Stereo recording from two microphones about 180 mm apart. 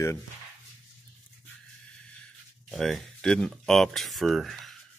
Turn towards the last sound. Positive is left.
turn(degrees=0)  # may be behind; listen again after turning